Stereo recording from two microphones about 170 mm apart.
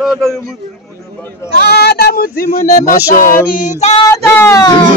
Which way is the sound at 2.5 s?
50° left (ahead or behind).